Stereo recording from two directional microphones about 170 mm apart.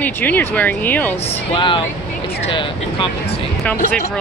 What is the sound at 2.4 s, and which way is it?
Speech, 30° left (ahead or behind).